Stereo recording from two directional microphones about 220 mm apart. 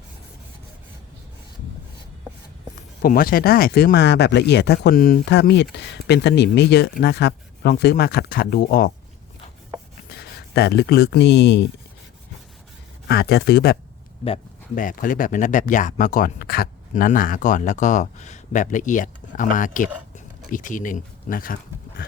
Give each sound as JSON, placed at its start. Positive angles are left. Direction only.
{"t": 3.0, "sound": "speech", "side_deg": 40}
{"t": 10.1, "sound": "speech", "side_deg": 45}
{"t": 13.1, "sound": "speech", "side_deg": 45}
{"t": 14.8, "sound": "speech", "side_deg": 40}